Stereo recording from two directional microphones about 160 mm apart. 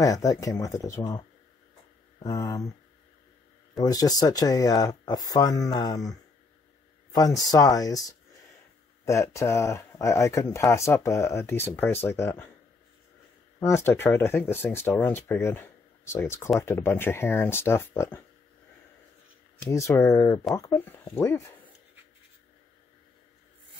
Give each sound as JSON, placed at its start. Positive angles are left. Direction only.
{"t": 0.0, "sound": "speech", "side_deg": 20}
{"t": 2.2, "sound": "speech", "side_deg": 20}
{"t": 3.8, "sound": "speech", "side_deg": 25}
{"t": 7.2, "sound": "speech", "side_deg": 25}
{"t": 13.6, "sound": "speech", "side_deg": 15}
{"t": 19.7, "sound": "speech", "side_deg": 20}